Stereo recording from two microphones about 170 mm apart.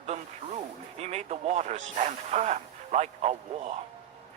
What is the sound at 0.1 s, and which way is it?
Speech, 40° right (ahead or behind).